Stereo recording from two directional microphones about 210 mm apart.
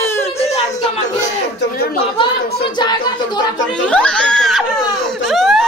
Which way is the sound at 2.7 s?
20° left (ahead or behind).